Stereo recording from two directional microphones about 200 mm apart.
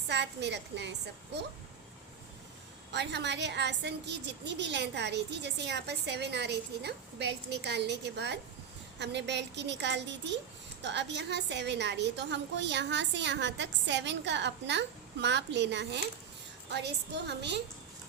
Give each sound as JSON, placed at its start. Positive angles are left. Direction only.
{"t": 0.1, "sound": "a woman's voice", "side_deg": -60}
{"t": 2.9, "sound": "a woman's voice", "side_deg": -60}